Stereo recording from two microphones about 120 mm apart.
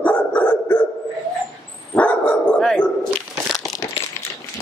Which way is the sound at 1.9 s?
10° left (ahead or behind).